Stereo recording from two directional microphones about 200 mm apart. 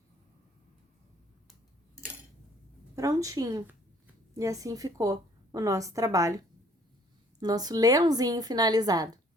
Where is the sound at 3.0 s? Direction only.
15° right (ahead or behind).